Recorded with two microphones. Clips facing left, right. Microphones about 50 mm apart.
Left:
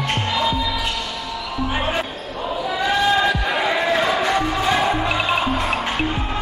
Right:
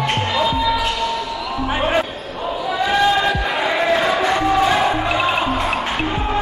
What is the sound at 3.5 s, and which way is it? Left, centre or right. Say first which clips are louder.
Crowd: right 2 dB; centre.